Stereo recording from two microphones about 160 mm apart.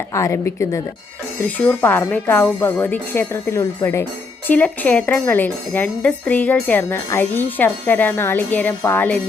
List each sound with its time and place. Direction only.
0.1 s speech: 20° left (ahead or behind)